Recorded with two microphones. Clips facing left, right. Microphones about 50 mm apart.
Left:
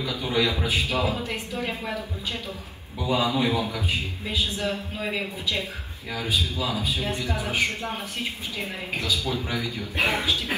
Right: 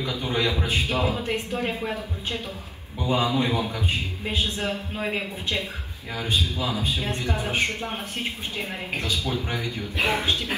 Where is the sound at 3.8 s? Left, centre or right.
Right.